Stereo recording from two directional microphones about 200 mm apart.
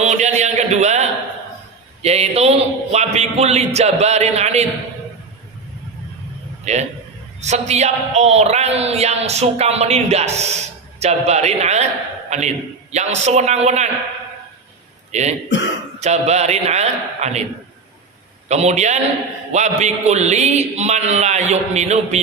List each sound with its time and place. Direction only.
0.0 s a sound: 35° right (ahead or behind)
2.0 s speech: 30° right (ahead or behind)
6.7 s speech: 35° right (ahead or behind)
15.1 s a man's voice: 35° right (ahead or behind)
18.4 s speech: 35° right (ahead or behind)